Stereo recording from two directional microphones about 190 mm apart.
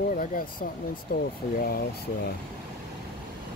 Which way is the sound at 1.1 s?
50° left (ahead or behind).